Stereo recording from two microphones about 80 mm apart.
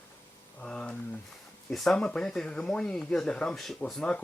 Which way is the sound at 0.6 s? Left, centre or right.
Centre.